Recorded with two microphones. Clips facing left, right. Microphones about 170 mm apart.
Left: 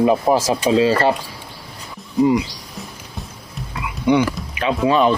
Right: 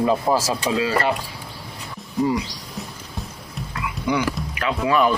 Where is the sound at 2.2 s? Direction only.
20° left (ahead or behind).